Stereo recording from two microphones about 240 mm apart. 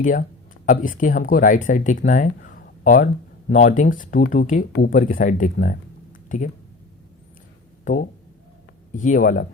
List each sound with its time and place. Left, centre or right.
0.0 s speech: left
6.2 s a sound: left
7.9 s speech: left